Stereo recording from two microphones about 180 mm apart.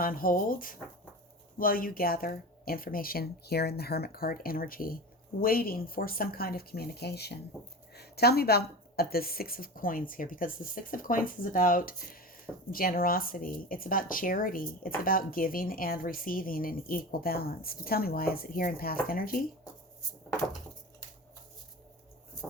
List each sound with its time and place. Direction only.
0.0 s speech: 50° left (ahead or behind)